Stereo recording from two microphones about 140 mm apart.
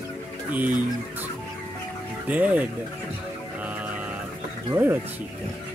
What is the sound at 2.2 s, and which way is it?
Speech, 10° right (ahead or behind).